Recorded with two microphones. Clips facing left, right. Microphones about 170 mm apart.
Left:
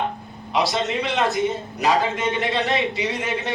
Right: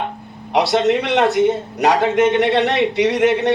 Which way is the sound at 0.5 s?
70° right (ahead or behind).